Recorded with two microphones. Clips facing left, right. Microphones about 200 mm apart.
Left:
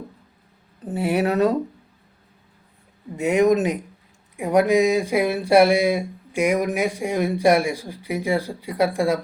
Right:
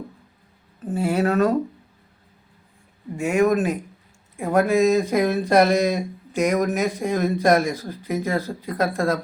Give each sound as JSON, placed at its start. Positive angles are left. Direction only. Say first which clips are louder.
{"t": 0.8, "sound": "speech", "louder": "even", "side_deg": 20}
{"t": 3.2, "sound": "speech", "louder": "left 2 dB", "side_deg": 20}